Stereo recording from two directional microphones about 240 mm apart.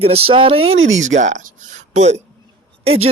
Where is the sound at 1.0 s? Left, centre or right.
Right.